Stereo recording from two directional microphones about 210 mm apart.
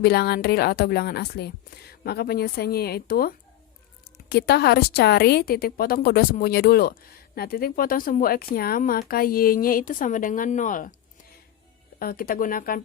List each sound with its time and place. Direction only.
0.0 s a woman's voice: 45° left (ahead or behind)
11.9 s a woman's voice: 45° left (ahead or behind)